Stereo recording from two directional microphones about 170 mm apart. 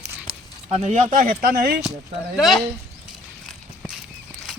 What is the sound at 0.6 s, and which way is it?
Speech, 40° right (ahead or behind).